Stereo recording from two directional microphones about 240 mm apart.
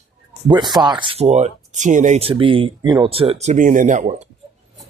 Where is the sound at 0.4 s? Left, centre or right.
Centre.